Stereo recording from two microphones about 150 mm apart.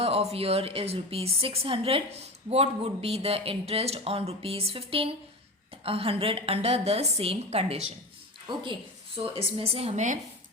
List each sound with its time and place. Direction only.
0.0 s speech: 40° right (ahead or behind)
8.4 s speech: 35° right (ahead or behind); by 10.2 s 55° right (ahead or behind)